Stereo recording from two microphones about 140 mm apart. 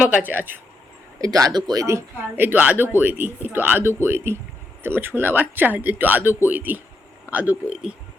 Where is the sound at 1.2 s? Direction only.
25° right (ahead or behind); by 7.9 s 5° right (ahead or behind).